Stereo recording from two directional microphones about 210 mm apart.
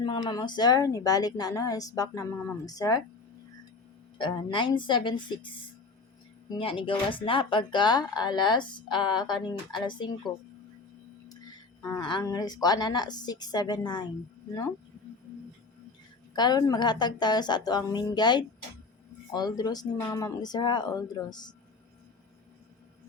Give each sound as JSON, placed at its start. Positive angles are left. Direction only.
{"t": 0.0, "sound": "a woman's voice", "side_deg": 20}
{"t": 4.2, "sound": "speech", "side_deg": 25}
{"t": 11.8, "sound": "speech", "side_deg": 20}
{"t": 16.3, "sound": "speech", "side_deg": 20}